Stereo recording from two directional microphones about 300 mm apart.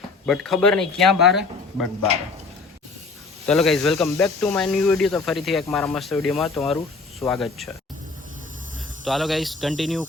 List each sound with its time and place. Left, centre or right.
0.3 s speech: centre
3.4 s speech: centre
9.0 s speech: centre